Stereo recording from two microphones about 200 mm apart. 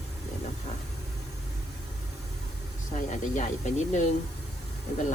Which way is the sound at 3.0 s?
40° left (ahead or behind).